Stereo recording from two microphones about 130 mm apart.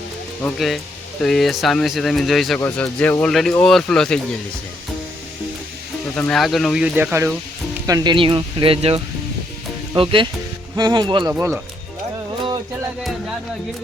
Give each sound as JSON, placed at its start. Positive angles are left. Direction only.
{"t": 0.4, "sound": "speech", "side_deg": 0}
{"t": 2.7, "sound": "speech", "side_deg": 10}
{"t": 6.1, "sound": "speech", "side_deg": 5}
{"t": 6.8, "sound": "speech", "side_deg": -15}
{"t": 8.1, "sound": "speech", "side_deg": -40}